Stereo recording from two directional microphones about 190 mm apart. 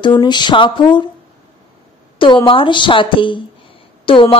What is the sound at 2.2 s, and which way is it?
Speech, 25° left (ahead or behind).